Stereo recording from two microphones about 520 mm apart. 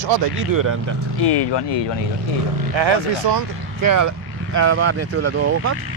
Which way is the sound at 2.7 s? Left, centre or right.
Right.